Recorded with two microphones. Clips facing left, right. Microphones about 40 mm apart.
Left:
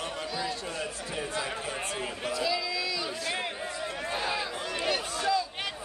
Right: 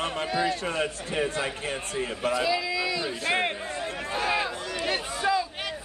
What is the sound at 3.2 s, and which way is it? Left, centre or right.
Speech, right.